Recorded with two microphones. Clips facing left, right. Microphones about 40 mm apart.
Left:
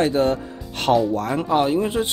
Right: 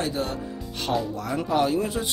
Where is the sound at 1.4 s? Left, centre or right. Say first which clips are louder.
Left 2 dB; left.